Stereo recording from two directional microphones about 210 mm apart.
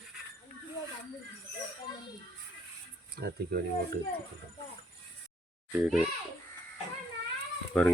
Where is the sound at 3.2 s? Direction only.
45° right (ahead or behind).